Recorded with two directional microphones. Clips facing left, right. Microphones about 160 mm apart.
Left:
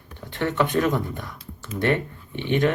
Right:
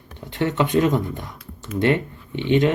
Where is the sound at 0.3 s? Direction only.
20° right (ahead or behind).